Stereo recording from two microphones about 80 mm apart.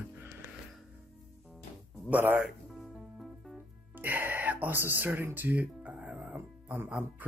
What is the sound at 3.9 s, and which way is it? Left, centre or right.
Speech, right.